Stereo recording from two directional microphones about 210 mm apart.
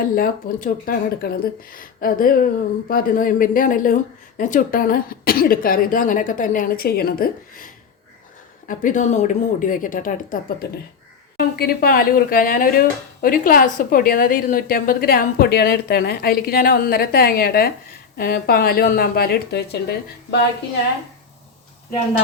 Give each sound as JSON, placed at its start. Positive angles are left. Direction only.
{"t": 0.0, "sound": "a woman's voice", "side_deg": 45}